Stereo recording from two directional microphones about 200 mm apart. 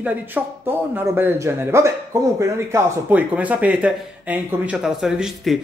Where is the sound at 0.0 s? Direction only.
10° right (ahead or behind).